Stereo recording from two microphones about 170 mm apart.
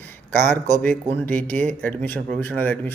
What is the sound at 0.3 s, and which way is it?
A man's voice, 10° left (ahead or behind).